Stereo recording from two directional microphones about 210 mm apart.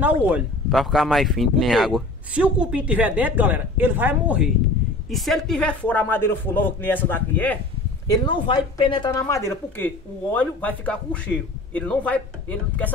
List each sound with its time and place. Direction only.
0.0 s speech: 5° right (ahead or behind); by 7.5 s 10° left (ahead or behind)
8.1 s speech: 20° left (ahead or behind)
9.2 s speech: 10° left (ahead or behind)